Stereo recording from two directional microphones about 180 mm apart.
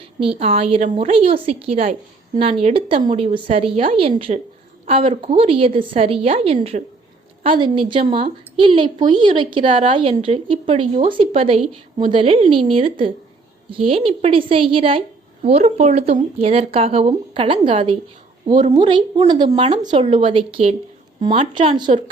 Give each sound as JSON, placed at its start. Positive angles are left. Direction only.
{"t": 0.0, "sound": "speech", "side_deg": -30}
{"t": 19.8, "sound": "speech", "side_deg": -25}